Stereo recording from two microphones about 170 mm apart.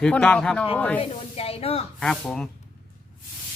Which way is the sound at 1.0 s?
35° left (ahead or behind).